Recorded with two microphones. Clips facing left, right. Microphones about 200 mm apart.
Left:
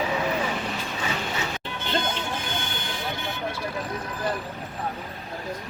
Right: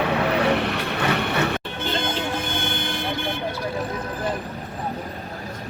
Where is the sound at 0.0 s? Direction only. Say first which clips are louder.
Right 5 dB; 65° right (ahead or behind).